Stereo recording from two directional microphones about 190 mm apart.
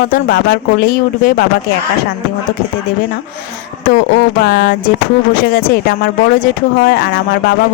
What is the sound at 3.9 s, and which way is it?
Speech, 55° left (ahead or behind).